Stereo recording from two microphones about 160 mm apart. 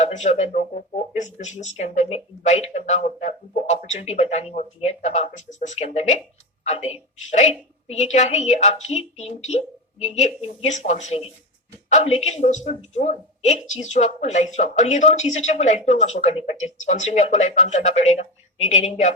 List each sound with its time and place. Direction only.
0.0 s speech: 45° left (ahead or behind)